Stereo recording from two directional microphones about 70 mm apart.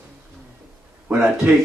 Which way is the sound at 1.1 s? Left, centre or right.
Centre.